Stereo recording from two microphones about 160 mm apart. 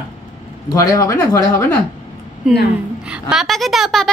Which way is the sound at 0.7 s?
20° left (ahead or behind).